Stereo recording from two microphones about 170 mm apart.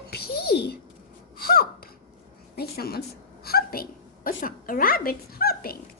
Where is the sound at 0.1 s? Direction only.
65° left (ahead or behind).